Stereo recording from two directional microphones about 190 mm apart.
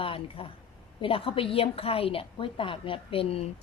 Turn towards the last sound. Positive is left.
turn(degrees=30)  # may be behind; listen again after turning